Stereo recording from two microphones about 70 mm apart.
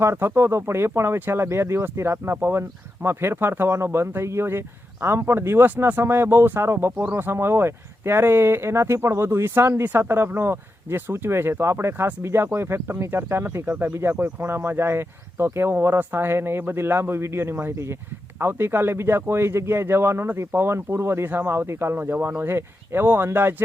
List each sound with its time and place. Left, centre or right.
0.0 s speech: right